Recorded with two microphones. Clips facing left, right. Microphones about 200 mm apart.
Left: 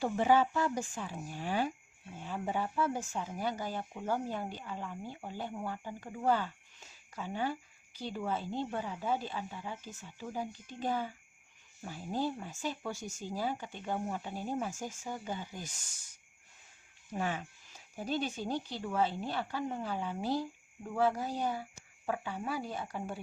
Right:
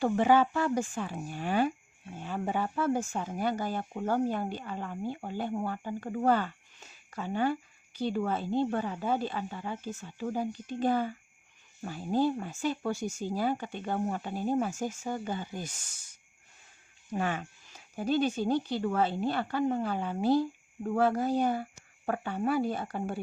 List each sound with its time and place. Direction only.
0.0 s speech: 70° right (ahead or behind)
17.2 s speech: 65° right (ahead or behind)